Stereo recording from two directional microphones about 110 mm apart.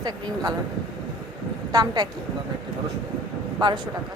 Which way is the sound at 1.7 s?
35° right (ahead or behind).